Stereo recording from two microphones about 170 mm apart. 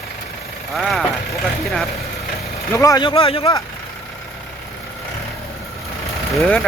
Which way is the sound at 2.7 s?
20° left (ahead or behind).